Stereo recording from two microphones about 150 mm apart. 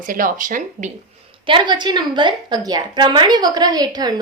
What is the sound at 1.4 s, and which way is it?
A woman's voice, 30° right (ahead or behind).